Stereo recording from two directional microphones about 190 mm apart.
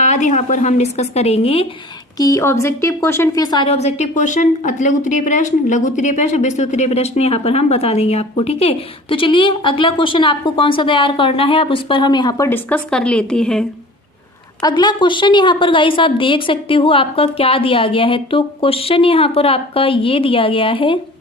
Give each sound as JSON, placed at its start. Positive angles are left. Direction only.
{"t": 0.0, "sound": "a woman's voice", "side_deg": 40}
{"t": 2.1, "sound": "a woman's voice", "side_deg": 15}
{"t": 14.6, "sound": "a woman's voice", "side_deg": 20}